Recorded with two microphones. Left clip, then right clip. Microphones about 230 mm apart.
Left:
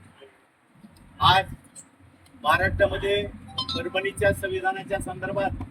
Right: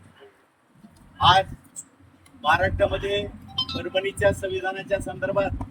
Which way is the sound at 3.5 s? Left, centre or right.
Left.